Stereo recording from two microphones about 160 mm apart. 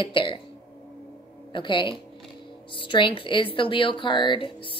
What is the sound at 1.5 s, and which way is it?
Speech, 30° left (ahead or behind).